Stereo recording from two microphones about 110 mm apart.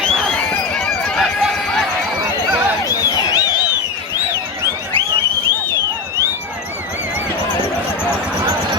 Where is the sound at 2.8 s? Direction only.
35° left (ahead or behind).